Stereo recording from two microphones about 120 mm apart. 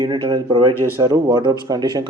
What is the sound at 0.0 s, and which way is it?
Speech, 35° right (ahead or behind).